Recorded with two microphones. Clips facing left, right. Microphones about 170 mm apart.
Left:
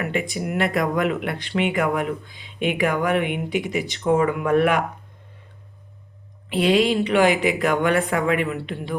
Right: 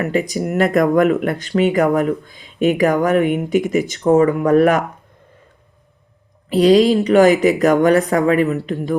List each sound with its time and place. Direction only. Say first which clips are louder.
0.0 s speech: right 6 dB; 40° right (ahead or behind)
6.5 s a woman's voice: right 7 dB; 40° right (ahead or behind)